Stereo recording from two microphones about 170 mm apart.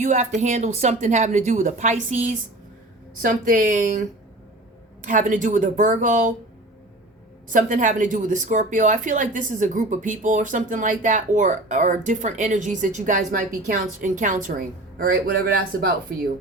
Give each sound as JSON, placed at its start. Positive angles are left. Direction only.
{"t": 0.0, "sound": "speech", "side_deg": -45}
{"t": 5.0, "sound": "speech", "side_deg": -50}
{"t": 7.5, "sound": "speech", "side_deg": -50}